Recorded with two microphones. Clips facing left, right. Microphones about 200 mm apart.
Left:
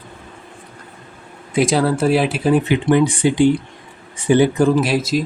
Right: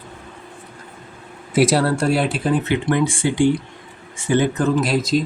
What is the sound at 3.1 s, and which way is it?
Speech, 20° left (ahead or behind).